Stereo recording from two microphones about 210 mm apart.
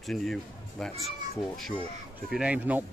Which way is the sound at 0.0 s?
Centre (ahead or behind).